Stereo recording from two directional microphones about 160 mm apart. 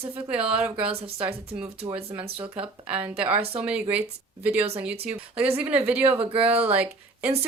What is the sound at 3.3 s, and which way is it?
Speech, 40° right (ahead or behind).